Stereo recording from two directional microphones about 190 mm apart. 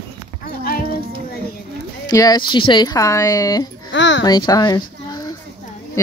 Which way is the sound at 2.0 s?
20° left (ahead or behind).